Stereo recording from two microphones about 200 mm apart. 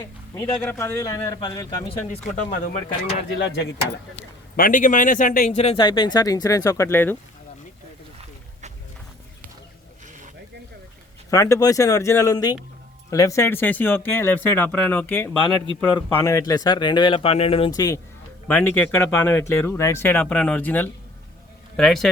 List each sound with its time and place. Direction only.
0.0 s speech: 15° left (ahead or behind)
1.9 s speech: 35° left (ahead or behind)
3.3 s speech: 60° left (ahead or behind)
4.5 s speech: 45° left (ahead or behind); by 7.2 s 10° left (ahead or behind)
10.1 s a sound: 40° right (ahead or behind)
11.3 s a man's voice: 15° left (ahead or behind)